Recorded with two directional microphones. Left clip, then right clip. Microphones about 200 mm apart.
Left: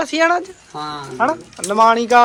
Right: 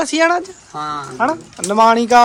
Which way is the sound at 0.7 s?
Centre (ahead or behind).